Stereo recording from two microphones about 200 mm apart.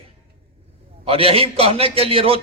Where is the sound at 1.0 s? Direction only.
30° right (ahead or behind).